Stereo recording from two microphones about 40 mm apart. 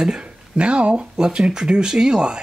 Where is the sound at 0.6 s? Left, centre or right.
Right.